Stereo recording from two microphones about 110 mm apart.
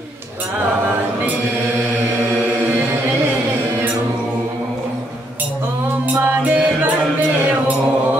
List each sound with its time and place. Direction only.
6.1 s music: 15° right (ahead or behind)